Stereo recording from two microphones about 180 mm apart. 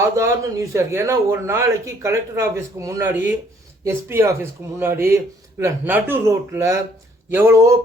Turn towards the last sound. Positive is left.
turn(degrees=-15)  # may be behind; listen again after turning